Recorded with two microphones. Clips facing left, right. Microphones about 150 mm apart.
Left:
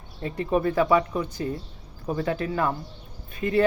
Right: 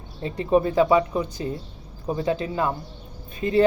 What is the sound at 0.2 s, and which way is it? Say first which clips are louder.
Speech: right 4 dB; 25° right (ahead or behind).